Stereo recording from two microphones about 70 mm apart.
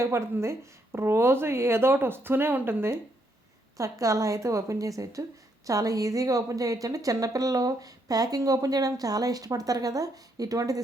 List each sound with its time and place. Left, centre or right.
0.0 s a woman's voice: right
3.8 s a woman's voice: right